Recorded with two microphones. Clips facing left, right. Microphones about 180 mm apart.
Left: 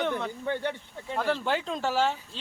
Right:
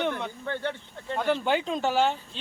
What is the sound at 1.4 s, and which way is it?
Speech, 25° right (ahead or behind).